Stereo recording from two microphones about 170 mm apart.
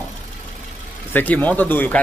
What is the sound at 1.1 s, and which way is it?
Speech, 10° left (ahead or behind).